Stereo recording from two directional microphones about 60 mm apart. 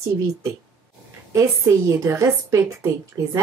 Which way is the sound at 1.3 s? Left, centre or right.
Right.